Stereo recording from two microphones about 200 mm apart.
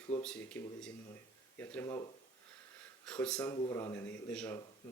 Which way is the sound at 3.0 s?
5° left (ahead or behind).